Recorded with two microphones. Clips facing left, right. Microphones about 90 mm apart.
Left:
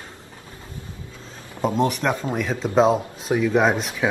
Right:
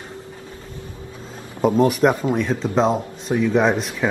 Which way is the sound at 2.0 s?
20° right (ahead or behind).